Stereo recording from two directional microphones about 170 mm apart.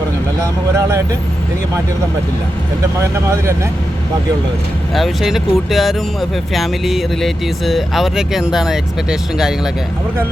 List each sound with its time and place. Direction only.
3.0 s speech: 15° right (ahead or behind)
4.9 s speech: centre (ahead or behind)